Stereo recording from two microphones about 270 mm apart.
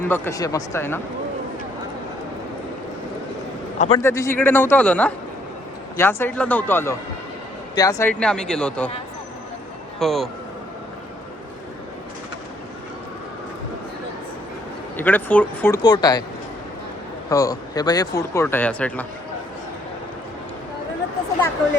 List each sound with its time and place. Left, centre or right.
0.0 s speech: centre
3.8 s a man's voice: left
4.0 s speech: centre
10.0 s speech: centre
14.9 s speech: centre
17.2 s speech: centre